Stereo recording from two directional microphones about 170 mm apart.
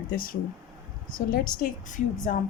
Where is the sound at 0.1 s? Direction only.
55° left (ahead or behind).